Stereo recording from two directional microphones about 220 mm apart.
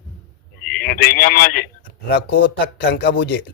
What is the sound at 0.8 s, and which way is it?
Speech, 40° left (ahead or behind).